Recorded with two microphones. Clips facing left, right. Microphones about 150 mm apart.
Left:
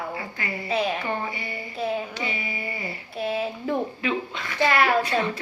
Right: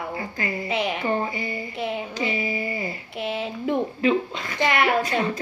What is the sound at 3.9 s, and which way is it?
Chuckle, 35° right (ahead or behind).